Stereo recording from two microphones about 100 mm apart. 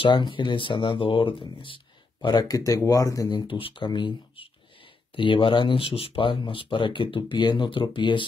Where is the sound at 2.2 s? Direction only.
40° left (ahead or behind).